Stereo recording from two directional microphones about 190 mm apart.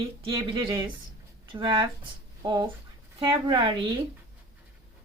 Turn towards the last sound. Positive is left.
turn(degrees=-20)  # may be behind; listen again after turning